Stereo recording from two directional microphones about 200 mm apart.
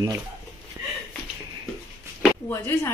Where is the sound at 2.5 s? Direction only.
10° left (ahead or behind).